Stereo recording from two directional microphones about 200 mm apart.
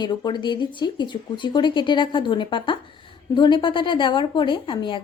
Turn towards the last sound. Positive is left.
turn(degrees=25)  # may be behind; listen again after turning